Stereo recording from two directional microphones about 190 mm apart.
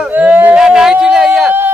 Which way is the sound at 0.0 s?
10° right (ahead or behind).